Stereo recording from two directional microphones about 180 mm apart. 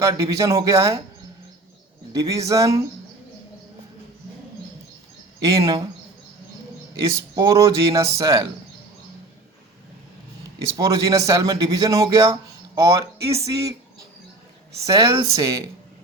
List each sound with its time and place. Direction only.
0.0 s speech: 20° right (ahead or behind)
2.1 s speech: 20° right (ahead or behind)
5.5 s a man's voice: 20° right (ahead or behind)
7.3 s speech: 15° right (ahead or behind)
10.8 s a man's voice: 20° right (ahead or behind)
14.8 s a man's voice: 20° right (ahead or behind)